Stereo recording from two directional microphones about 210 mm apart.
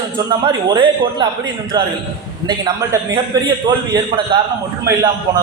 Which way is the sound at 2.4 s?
15° right (ahead or behind).